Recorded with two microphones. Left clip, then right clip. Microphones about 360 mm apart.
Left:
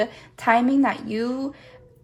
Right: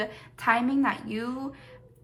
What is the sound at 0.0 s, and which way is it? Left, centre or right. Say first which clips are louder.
A woman's voice: left 5 dB; centre.